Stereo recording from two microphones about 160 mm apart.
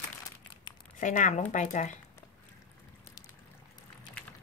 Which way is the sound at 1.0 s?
50° left (ahead or behind).